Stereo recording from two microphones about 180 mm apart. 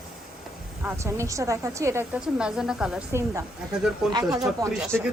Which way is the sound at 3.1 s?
15° right (ahead or behind).